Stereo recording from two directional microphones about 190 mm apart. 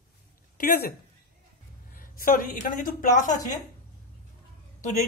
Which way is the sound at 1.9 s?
45° left (ahead or behind).